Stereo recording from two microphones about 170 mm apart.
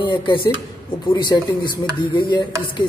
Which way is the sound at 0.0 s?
25° left (ahead or behind).